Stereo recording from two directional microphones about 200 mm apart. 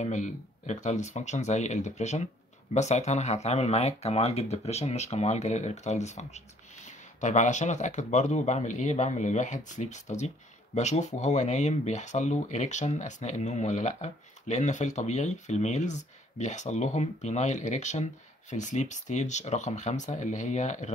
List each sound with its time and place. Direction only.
0.0 s speech: 35° left (ahead or behind)